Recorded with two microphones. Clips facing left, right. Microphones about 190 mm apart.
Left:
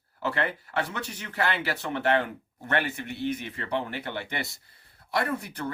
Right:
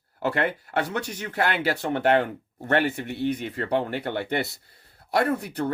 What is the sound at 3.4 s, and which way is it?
Speech, 50° right (ahead or behind).